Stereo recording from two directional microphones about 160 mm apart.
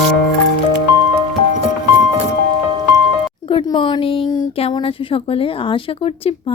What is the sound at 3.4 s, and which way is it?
A woman's voice, 30° left (ahead or behind).